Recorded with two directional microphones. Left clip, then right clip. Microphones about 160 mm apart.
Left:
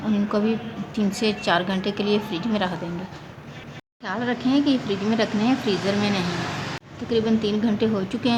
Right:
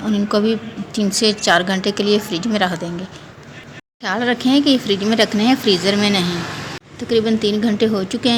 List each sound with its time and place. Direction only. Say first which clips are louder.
0.0 s speech: right 6 dB; 15° right (ahead or behind)
4.0 s speech: right 7 dB; 25° right (ahead or behind)